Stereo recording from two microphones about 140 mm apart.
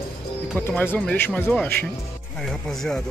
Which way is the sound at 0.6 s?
15° left (ahead or behind).